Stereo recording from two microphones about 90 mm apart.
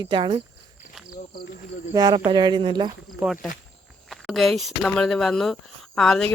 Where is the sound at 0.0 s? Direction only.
60° right (ahead or behind).